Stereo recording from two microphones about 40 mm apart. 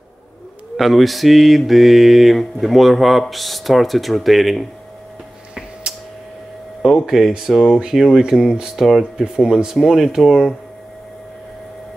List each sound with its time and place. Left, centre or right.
0.7 s mantra: centre
6.8 s speech: centre
8.2 s speech: centre
8.7 s mantra: centre
9.2 s speech: centre